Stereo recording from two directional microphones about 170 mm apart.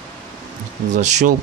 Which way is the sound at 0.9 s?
45° right (ahead or behind).